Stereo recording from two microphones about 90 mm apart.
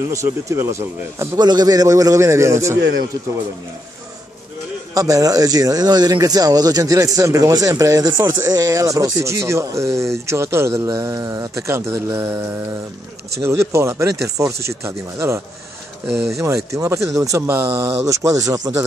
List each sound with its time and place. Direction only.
0.1 s speech: 35° right (ahead or behind)
1.4 s speech: 50° right (ahead or behind); by 2.8 s 35° right (ahead or behind)
4.9 s speech: 40° right (ahead or behind)
8.1 s speech: 55° right (ahead or behind); by 12.0 s 30° right (ahead or behind)
13.4 s speech: 30° right (ahead or behind)
17.5 s speech: 20° right (ahead or behind); by 18.7 s 40° right (ahead or behind)